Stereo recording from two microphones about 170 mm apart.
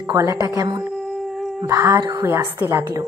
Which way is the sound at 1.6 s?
20° right (ahead or behind).